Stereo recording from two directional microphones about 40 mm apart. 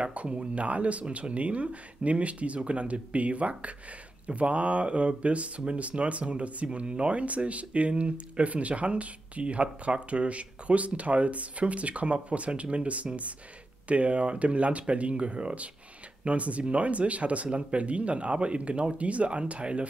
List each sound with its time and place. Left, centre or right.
0.0 s speech: right